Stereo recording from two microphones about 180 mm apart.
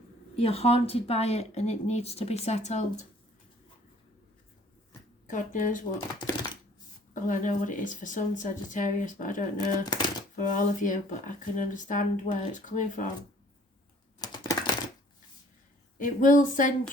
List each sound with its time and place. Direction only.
0.3 s speech: 35° left (ahead or behind)
5.2 s speech: 45° left (ahead or behind)
5.9 s speech: 20° left (ahead or behind)
7.1 s speech: 45° left (ahead or behind)
9.6 s speech: 20° left (ahead or behind)
10.3 s speech: 45° left (ahead or behind)
14.2 s typing: 20° left (ahead or behind)
16.0 s speech: 45° left (ahead or behind)